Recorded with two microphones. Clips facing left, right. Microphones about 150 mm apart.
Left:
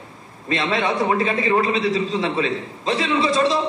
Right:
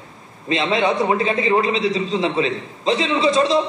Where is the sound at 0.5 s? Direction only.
25° right (ahead or behind).